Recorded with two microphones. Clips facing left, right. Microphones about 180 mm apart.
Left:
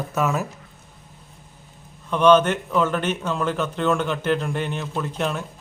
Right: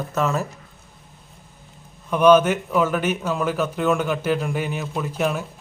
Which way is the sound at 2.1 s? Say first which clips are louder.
Right 1 dB; 10° right (ahead or behind).